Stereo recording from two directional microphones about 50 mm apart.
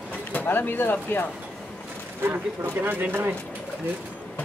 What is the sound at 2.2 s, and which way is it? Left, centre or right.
Speech, right.